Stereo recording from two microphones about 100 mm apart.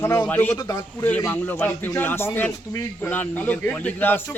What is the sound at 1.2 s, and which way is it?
A man's voice, 20° left (ahead or behind).